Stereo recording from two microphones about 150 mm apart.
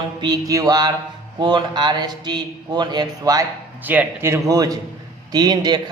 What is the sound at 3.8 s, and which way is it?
A man's voice, 10° right (ahead or behind).